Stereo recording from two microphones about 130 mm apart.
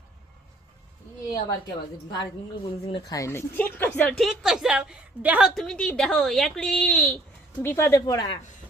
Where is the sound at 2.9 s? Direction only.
30° left (ahead or behind); by 4.2 s 10° left (ahead or behind).